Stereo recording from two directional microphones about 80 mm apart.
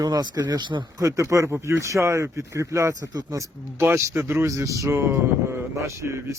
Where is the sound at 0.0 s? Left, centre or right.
Right.